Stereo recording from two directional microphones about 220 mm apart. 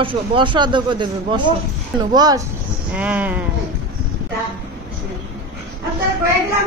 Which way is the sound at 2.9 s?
5° right (ahead or behind).